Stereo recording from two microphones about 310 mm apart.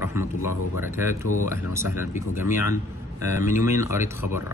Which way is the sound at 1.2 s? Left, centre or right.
Left.